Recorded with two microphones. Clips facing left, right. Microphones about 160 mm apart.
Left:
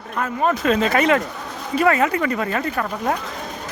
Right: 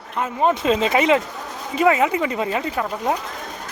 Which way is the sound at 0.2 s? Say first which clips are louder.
Right 1 dB; 20° right (ahead or behind).